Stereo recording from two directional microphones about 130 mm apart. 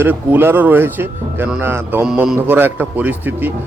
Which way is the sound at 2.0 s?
5° right (ahead or behind).